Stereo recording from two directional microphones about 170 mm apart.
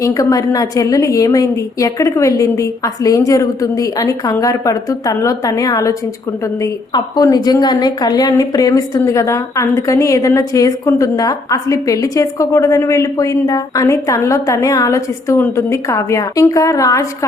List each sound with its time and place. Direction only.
0.0 s a woman's voice: 20° left (ahead or behind)